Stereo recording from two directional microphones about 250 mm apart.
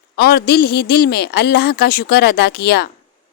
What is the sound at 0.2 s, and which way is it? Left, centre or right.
Speech, left.